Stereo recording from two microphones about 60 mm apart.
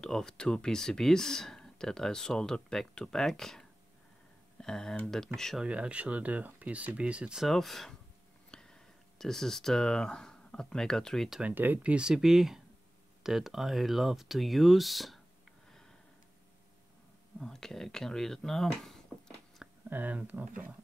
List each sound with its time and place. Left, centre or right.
0.0 s speech: centre
5.6 s speech: centre
7.3 s speech: centre
11.4 s speech: right
11.9 s speech: centre
17.4 s speech: centre
19.9 s speech: right